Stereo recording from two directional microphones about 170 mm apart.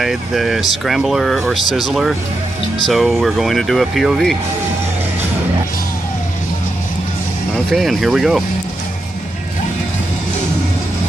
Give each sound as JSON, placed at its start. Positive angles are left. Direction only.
{"t": 0.0, "sound": "speech", "side_deg": 0}
{"t": 7.5, "sound": "speech", "side_deg": 0}